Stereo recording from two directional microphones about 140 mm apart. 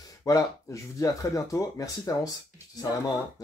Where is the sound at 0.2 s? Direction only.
25° left (ahead or behind).